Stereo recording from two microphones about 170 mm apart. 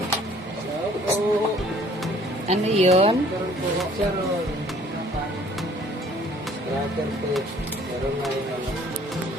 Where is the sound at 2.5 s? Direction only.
40° right (ahead or behind).